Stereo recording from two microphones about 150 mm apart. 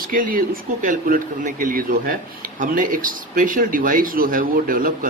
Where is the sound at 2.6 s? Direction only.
60° right (ahead or behind).